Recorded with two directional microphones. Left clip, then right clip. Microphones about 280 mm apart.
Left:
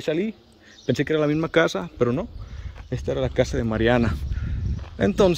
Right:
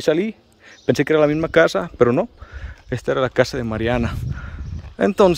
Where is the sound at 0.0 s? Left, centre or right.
Centre.